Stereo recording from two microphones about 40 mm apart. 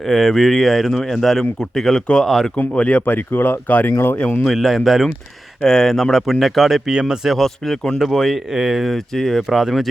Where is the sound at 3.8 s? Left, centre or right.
Left.